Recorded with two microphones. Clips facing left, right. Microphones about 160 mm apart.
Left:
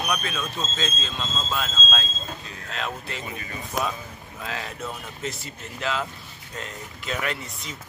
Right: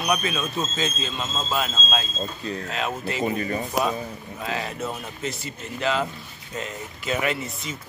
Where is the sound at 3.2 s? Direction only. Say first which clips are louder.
Right 11 dB; 40° right (ahead or behind).